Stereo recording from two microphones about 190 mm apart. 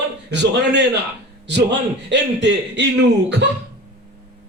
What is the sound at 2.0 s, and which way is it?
Speech, 65° right (ahead or behind).